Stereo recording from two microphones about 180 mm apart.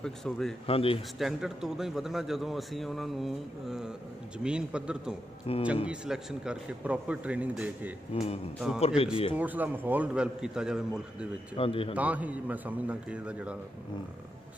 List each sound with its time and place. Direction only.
0.0 s a man's voice: centre (ahead or behind)
0.7 s speech: 30° left (ahead or behind)
1.2 s a man's voice: 5° right (ahead or behind)
5.5 s speech: 30° left (ahead or behind)
5.9 s a man's voice: 5° right (ahead or behind)
8.1 s speech: 35° left (ahead or behind)
8.5 s a man's voice: 5° right (ahead or behind)
8.8 s speech: 30° left (ahead or behind)
9.4 s a man's voice: 10° right (ahead or behind)
11.5 s speech: 30° left (ahead or behind)
11.9 s a man's voice: 10° right (ahead or behind)